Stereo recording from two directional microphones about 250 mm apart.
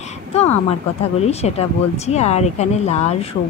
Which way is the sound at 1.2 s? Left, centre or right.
Left.